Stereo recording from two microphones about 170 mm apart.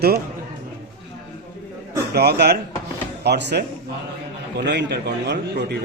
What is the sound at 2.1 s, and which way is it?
Speech, 70° right (ahead or behind).